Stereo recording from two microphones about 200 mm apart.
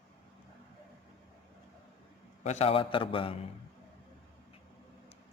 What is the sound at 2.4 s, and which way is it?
Speech, 30° left (ahead or behind).